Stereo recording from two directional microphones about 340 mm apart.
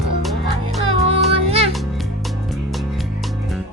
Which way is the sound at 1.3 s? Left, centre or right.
Centre.